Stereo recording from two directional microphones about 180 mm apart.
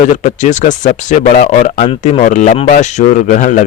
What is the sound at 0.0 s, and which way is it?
A man's voice, 45° left (ahead or behind).